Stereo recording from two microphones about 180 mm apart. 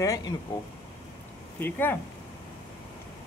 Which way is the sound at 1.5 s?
10° left (ahead or behind).